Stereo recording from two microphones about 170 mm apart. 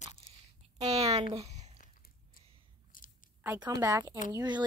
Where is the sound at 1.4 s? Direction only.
40° right (ahead or behind).